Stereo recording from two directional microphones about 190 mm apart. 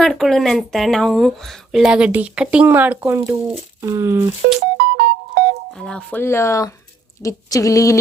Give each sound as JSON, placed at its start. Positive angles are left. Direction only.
{"t": 0.0, "sound": "speech", "side_deg": 0}
{"t": 4.8, "sound": "music", "side_deg": -60}
{"t": 5.8, "sound": "speech", "side_deg": 5}